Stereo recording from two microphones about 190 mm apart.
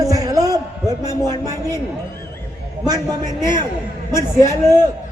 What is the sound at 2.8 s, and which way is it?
Speech, 20° right (ahead or behind).